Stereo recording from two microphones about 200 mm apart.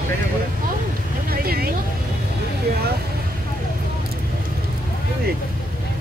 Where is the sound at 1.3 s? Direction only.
50° right (ahead or behind).